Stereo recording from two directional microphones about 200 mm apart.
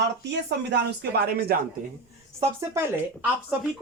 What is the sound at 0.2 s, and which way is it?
Speech, 60° right (ahead or behind).